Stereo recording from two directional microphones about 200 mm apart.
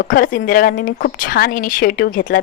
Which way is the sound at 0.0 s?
45° left (ahead or behind).